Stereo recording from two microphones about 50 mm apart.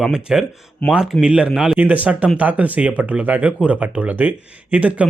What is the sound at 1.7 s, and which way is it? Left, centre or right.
A man's voice, right.